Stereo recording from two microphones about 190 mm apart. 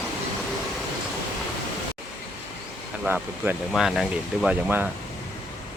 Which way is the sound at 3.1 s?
10° right (ahead or behind).